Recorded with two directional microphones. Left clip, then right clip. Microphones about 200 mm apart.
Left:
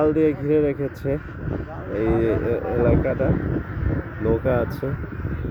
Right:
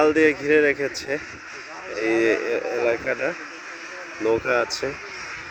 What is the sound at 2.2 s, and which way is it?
Speech, 5° left (ahead or behind).